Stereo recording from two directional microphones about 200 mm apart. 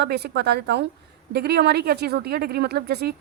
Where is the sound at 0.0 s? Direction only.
55° right (ahead or behind).